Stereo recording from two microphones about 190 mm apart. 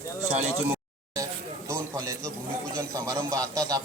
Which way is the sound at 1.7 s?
15° right (ahead or behind).